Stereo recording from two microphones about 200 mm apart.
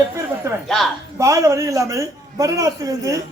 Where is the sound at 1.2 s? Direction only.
15° right (ahead or behind).